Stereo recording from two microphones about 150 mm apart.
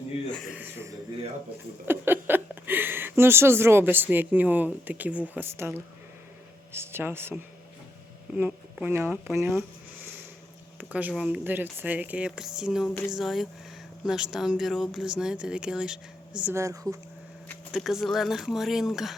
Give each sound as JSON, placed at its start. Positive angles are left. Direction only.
{"t": 0.5, "sound": "a sound", "side_deg": -15}
{"t": 1.9, "sound": "speech", "side_deg": -15}
{"t": 8.4, "sound": "speech", "side_deg": -10}
{"t": 10.8, "sound": "a sound", "side_deg": -10}
{"t": 11.1, "sound": "speech", "side_deg": -5}
{"t": 17.7, "sound": "speech", "side_deg": 0}